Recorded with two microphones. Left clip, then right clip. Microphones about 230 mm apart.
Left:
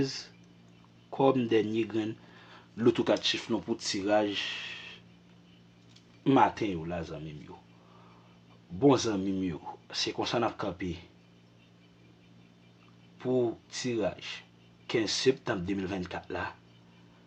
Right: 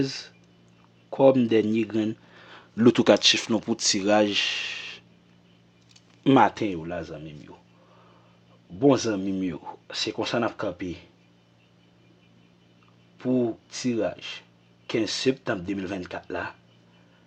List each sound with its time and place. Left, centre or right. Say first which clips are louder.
0.0 s speech: right 4 dB; right
6.2 s speech: right 5 dB; right
8.8 s speech: right 4 dB; right
13.1 s speech: right 3 dB; right